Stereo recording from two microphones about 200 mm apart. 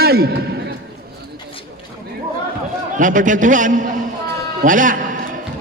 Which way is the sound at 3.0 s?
40° right (ahead or behind).